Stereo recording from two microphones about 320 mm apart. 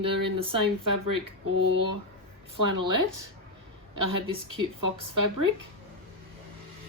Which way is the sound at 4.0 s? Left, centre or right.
Right.